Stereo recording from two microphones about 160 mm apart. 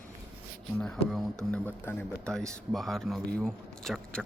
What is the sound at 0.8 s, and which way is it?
Speech, centre (ahead or behind).